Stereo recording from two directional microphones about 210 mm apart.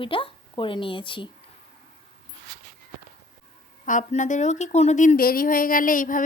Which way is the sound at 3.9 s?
35° left (ahead or behind).